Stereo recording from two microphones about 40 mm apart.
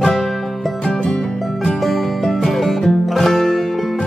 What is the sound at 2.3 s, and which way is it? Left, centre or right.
Music, centre.